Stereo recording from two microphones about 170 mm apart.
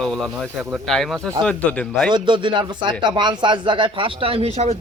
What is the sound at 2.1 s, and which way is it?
Speech, 30° right (ahead or behind).